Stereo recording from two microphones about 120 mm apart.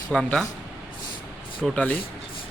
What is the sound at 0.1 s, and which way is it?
Speech, 5° left (ahead or behind).